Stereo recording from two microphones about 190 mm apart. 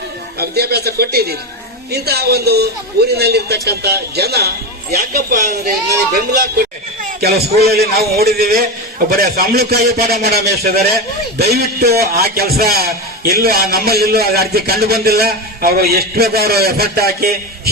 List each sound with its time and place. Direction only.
0.3 s a man's voice: 55° right (ahead or behind)
6.6 s music: 55° right (ahead or behind)
7.6 s a man's voice: 55° right (ahead or behind)